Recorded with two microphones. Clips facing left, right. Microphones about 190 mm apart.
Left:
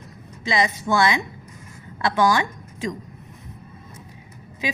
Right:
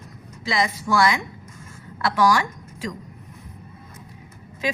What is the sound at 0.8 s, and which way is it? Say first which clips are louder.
Speech: right 1 dB; 20° left (ahead or behind).